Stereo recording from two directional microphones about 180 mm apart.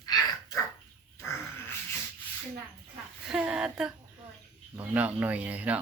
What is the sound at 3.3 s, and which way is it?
Speech, 5° right (ahead or behind).